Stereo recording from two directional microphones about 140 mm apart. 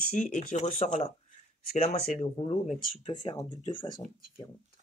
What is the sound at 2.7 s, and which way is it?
Speech, 85° left.